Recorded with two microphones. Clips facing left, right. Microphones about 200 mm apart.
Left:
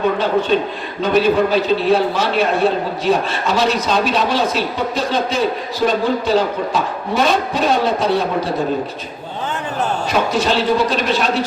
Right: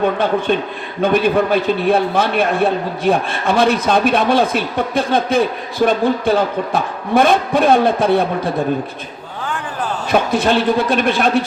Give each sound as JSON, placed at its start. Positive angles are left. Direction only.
{"t": 0.5, "sound": "speech", "side_deg": -55}
{"t": 10.1, "sound": "speech", "side_deg": -55}